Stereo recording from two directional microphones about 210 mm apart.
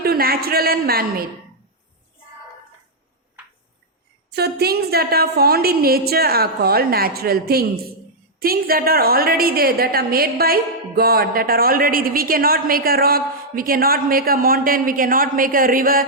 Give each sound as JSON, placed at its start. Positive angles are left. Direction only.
{"t": 0.0, "sound": "a man's voice", "side_deg": -45}
{"t": 4.3, "sound": "a woman's voice", "side_deg": -50}